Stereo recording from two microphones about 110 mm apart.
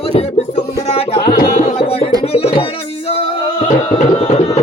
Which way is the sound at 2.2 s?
65° left (ahead or behind).